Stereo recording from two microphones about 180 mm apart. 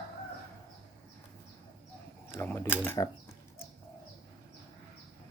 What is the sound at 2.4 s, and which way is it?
Speech, 10° left (ahead or behind).